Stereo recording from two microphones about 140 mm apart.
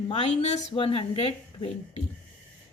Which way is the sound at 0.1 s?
55° left (ahead or behind).